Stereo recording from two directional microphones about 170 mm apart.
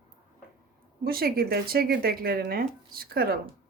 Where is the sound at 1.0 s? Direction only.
65° right (ahead or behind).